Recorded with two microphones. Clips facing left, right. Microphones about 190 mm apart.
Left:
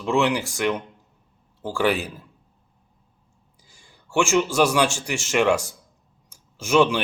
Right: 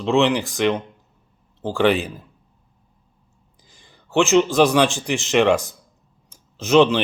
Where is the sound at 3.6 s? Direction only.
10° left (ahead or behind).